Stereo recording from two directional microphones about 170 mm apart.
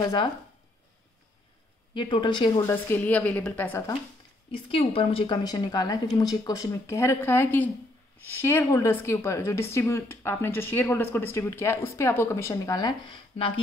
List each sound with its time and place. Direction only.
0.0 s a woman's voice: 25° left (ahead or behind)
2.0 s a woman's voice: 30° left (ahead or behind)
2.6 s a woman's voice: 10° left (ahead or behind)
4.5 s a woman's voice: 35° left (ahead or behind)